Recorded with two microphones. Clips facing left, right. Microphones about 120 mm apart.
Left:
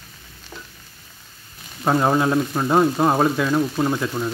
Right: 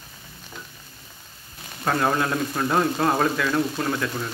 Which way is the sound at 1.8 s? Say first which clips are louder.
Left 4 dB; 20° left (ahead or behind).